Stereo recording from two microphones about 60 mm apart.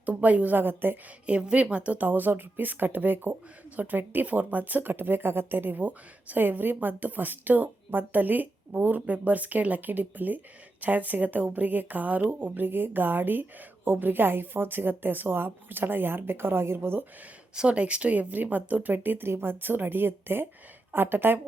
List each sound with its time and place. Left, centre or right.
0.0 s speech: right
1.3 s speech: centre; by 17.0 s right
17.5 s speech: centre; by 21.4 s right